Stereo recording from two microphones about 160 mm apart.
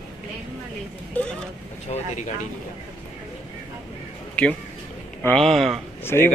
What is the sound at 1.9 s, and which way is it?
Speech, 40° left (ahead or behind).